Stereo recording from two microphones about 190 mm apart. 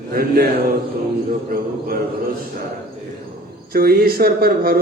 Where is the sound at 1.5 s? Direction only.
50° right (ahead or behind).